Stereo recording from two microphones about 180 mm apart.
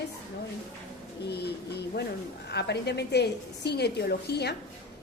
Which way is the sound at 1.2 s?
65° left (ahead or behind).